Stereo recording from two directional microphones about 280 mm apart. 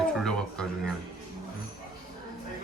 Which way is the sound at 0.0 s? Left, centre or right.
Centre.